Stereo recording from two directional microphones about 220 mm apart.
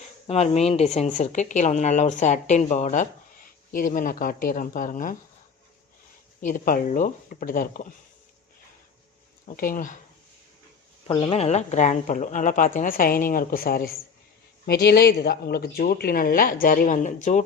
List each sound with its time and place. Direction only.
0.3 s speech: 30° left (ahead or behind)
6.4 s speech: 40° left (ahead or behind)
9.5 s speech: 40° left (ahead or behind)
11.1 s speech: 20° left (ahead or behind)